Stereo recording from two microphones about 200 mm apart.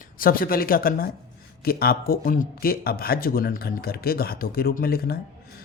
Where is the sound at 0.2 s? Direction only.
45° left (ahead or behind).